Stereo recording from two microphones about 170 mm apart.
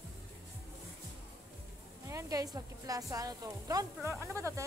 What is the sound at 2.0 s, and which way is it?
A woman's voice, 20° right (ahead or behind).